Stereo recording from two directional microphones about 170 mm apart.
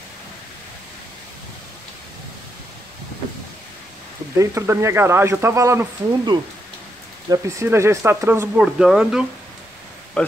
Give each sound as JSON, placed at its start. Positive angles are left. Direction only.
{"t": 4.4, "sound": "speech", "side_deg": -15}
{"t": 8.5, "sound": "speech", "side_deg": -5}